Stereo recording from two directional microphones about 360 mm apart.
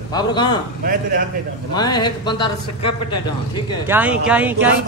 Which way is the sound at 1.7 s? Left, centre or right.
Centre.